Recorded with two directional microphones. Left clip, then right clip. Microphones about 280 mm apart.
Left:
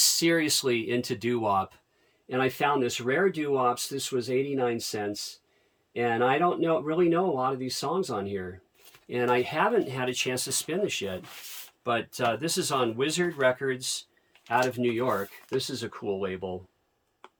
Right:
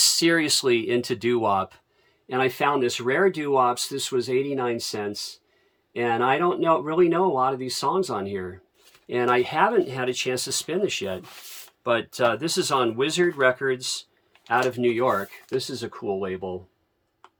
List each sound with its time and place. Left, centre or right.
0.0 s speech: centre